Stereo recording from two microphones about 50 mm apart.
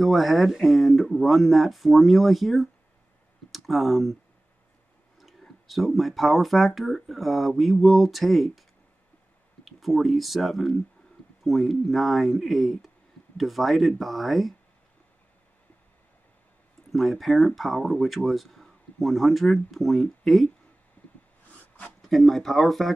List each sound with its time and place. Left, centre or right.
0.0 s speech: centre
5.7 s speech: centre
9.7 s speech: centre
16.9 s speech: centre
21.0 s a sound: left
22.1 s speech: centre